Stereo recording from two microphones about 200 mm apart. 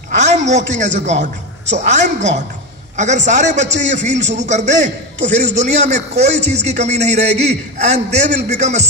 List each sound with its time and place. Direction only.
0.2 s a woman's voice: 35° right (ahead or behind)
4.1 s speech: 60° right (ahead or behind)
4.5 s a man's voice: 35° right (ahead or behind)
8.3 s speech: 55° right (ahead or behind)
8.5 s a man's voice: 35° right (ahead or behind)